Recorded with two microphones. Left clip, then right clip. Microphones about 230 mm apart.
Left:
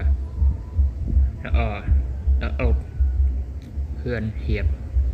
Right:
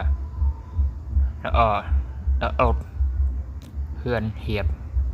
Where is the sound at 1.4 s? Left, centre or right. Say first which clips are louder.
Right 10 dB; right.